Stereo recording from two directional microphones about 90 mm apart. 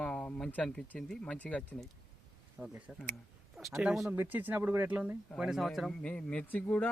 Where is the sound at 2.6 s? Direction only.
10° right (ahead or behind).